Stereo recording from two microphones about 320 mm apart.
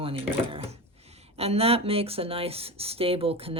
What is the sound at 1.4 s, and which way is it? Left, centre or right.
Speech, centre.